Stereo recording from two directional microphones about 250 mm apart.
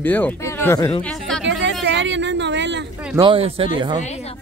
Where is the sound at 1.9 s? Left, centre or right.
Right.